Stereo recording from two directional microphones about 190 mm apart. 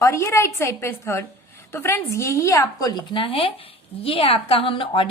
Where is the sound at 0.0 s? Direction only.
15° left (ahead or behind).